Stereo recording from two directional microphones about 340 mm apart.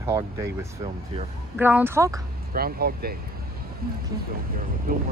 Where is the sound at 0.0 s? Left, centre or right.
Centre.